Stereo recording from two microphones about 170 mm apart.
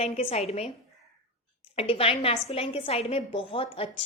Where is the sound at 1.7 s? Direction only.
35° left (ahead or behind).